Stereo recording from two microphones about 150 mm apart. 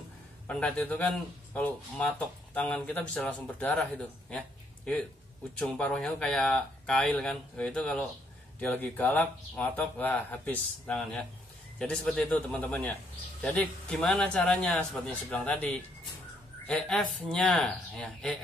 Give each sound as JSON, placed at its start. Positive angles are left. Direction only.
{"t": 0.5, "sound": "a man's voice", "side_deg": 10}
{"t": 4.3, "sound": "a sound", "side_deg": 5}
{"t": 5.6, "sound": "a man's voice", "side_deg": 5}